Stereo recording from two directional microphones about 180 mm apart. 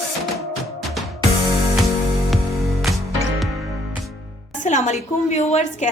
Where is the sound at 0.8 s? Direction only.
Centre (ahead or behind).